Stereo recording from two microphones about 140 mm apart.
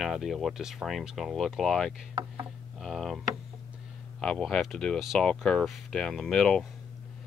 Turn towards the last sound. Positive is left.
turn(degrees=0)  # may be behind; listen again after turning